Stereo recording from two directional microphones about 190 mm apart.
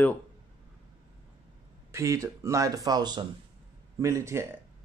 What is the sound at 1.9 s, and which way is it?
Speech, 15° right (ahead or behind).